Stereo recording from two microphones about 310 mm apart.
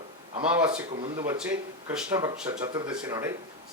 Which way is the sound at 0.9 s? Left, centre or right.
Centre.